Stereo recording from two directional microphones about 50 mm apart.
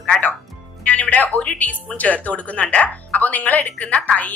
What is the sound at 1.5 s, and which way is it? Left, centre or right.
A woman's voice, left.